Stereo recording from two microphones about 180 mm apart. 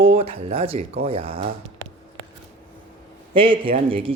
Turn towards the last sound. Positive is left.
turn(degrees=-30)  # may be behind; listen again after turning